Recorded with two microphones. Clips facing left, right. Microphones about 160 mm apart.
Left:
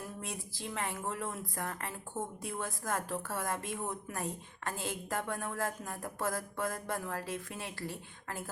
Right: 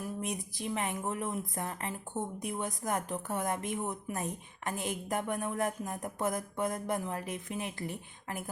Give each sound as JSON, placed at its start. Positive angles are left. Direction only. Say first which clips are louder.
{"t": 0.2, "sound": "a woman's voice", "louder": "right 5 dB", "side_deg": -20}